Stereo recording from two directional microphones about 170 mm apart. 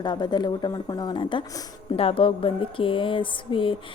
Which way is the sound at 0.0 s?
25° left (ahead or behind).